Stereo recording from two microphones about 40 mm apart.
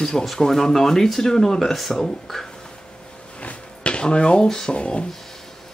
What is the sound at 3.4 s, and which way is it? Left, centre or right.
Drawer open or close, left.